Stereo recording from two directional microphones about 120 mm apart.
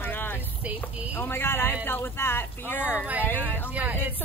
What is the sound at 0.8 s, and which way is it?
Speech, 20° left (ahead or behind).